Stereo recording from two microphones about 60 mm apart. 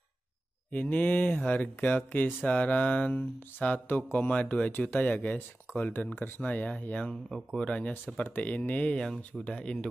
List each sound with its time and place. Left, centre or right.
0.7 s speech: left
7.2 s speech: centre
7.6 s speech: centre